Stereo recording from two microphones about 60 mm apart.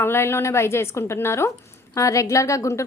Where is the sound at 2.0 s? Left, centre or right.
Left.